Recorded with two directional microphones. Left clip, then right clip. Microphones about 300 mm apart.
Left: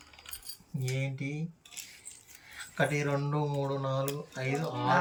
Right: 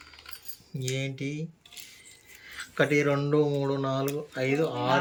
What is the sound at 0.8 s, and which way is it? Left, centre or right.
Speech, centre.